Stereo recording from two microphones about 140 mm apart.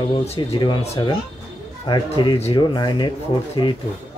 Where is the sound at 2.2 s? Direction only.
35° left (ahead or behind).